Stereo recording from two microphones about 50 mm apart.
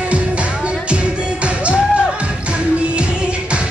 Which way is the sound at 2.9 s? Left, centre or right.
Right.